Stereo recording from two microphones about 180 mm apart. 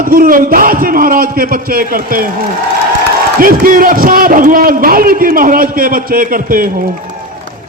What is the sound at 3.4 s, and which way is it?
A man's voice, 50° right (ahead or behind).